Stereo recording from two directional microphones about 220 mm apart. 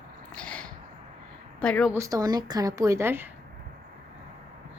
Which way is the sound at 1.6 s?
5° left (ahead or behind).